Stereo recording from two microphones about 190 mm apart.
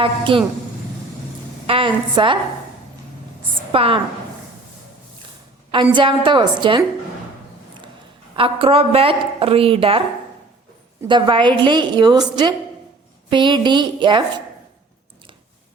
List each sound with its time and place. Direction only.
0.0 s a woman's voice: 25° right (ahead or behind)
1.6 s a woman's voice: 30° right (ahead or behind)
3.7 s a woman's voice: 30° right (ahead or behind)
5.7 s a woman's voice: 25° right (ahead or behind)
8.4 s a woman's voice: 30° right (ahead or behind)
11.1 s a woman's voice: 25° right (ahead or behind)
13.3 s a woman's voice: 25° right (ahead or behind)